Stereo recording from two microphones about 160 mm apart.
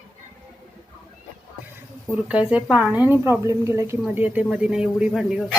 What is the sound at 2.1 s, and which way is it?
A woman's voice, 10° right (ahead or behind).